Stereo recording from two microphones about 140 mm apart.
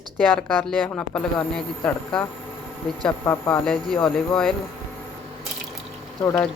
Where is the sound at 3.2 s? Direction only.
15° left (ahead or behind).